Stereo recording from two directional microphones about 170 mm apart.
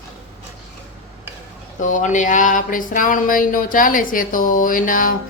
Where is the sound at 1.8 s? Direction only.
45° left (ahead or behind).